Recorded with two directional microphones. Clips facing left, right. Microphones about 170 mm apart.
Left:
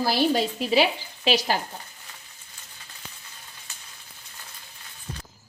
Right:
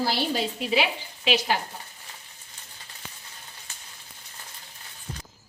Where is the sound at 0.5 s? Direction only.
35° left (ahead or behind).